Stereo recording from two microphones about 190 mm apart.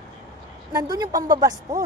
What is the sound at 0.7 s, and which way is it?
A woman's voice, 20° right (ahead or behind).